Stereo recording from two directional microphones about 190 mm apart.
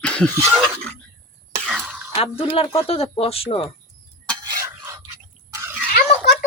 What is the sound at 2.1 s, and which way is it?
Speech, 30° left (ahead or behind).